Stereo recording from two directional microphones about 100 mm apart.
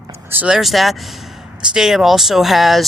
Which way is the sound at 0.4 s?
5° right (ahead or behind).